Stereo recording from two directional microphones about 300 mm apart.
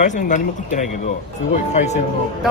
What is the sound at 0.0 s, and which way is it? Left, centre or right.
Speech, left.